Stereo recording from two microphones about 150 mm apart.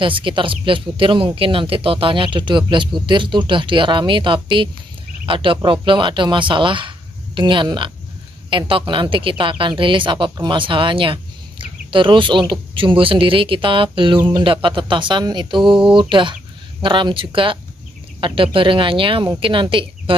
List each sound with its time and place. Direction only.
0.0 s speech: 35° right (ahead or behind)